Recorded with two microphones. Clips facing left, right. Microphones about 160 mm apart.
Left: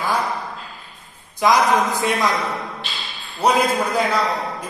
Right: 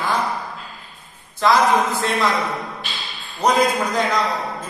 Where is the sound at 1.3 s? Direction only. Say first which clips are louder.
Even; 15° left (ahead or behind).